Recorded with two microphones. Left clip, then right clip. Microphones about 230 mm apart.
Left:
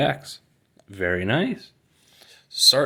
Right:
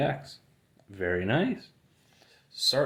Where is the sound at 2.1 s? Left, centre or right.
Left.